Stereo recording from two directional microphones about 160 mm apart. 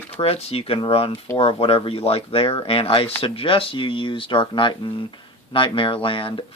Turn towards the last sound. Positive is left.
turn(degrees=35)  # may be behind; listen again after turning